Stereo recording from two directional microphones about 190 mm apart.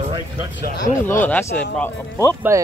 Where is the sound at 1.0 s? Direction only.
10° left (ahead or behind).